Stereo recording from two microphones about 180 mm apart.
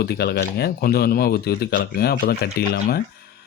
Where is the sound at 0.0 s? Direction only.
65° left (ahead or behind).